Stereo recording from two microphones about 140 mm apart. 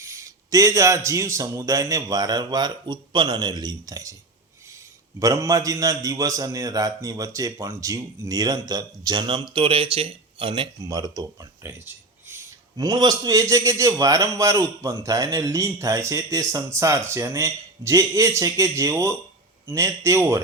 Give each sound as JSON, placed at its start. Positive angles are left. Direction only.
{"t": 0.0, "sound": "a man's voice", "side_deg": -20}
{"t": 5.2, "sound": "a man's voice", "side_deg": -25}
{"t": 12.7, "sound": "a man's voice", "side_deg": -25}